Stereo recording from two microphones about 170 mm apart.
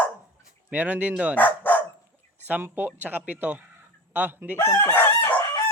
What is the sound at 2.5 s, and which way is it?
Speech, 10° right (ahead or behind).